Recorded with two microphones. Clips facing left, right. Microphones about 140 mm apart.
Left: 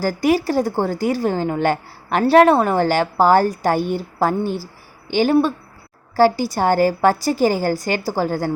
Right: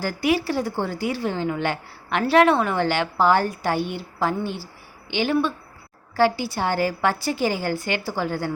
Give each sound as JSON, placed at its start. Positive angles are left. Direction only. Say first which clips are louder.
{"t": 0.0, "sound": "a woman's voice", "louder": "left 5 dB", "side_deg": 40}